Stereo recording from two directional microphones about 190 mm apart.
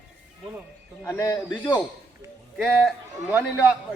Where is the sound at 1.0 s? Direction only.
15° left (ahead or behind).